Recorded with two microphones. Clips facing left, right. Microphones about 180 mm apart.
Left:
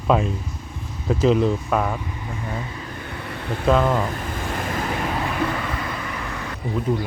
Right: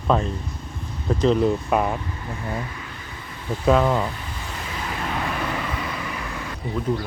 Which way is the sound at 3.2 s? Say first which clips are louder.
Left 1 dB; 70° left (ahead or behind).